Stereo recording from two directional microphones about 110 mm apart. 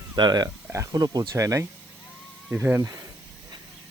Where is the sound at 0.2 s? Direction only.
40° right (ahead or behind).